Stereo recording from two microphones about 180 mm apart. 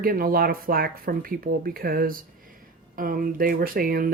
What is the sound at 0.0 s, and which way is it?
Speech, 55° right (ahead or behind).